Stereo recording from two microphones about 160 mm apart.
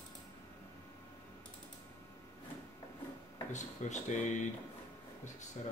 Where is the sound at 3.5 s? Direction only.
50° left (ahead or behind).